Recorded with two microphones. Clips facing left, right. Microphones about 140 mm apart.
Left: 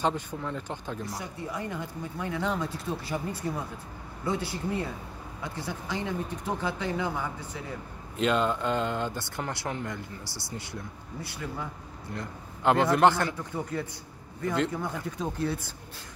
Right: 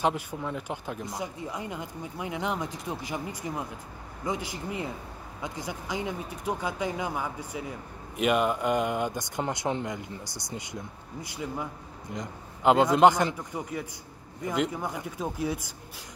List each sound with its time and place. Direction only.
0.0 s speech: 10° right (ahead or behind)
12.1 s speech: 15° right (ahead or behind)